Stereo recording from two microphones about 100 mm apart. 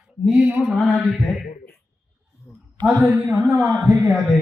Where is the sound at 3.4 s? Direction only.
25° right (ahead or behind).